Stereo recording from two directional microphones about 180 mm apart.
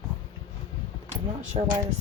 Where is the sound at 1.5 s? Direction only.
30° right (ahead or behind).